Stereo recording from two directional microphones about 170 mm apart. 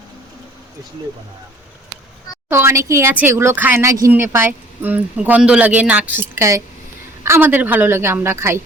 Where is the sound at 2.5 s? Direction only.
15° right (ahead or behind).